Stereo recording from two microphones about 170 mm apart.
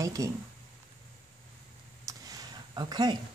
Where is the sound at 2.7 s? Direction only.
25° right (ahead or behind).